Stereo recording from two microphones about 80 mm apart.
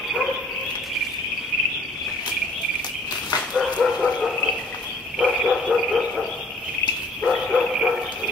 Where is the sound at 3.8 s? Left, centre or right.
Centre.